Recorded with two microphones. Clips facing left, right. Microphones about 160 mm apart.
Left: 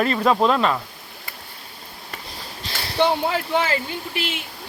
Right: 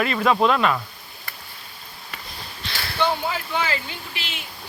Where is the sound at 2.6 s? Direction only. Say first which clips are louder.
Left 1 dB; 35° left (ahead or behind).